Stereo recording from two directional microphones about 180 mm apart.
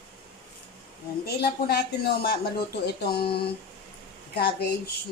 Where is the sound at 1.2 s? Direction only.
65° left (ahead or behind).